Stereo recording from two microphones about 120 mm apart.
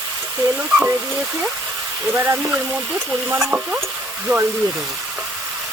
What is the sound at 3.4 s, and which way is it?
Speech, 10° right (ahead or behind).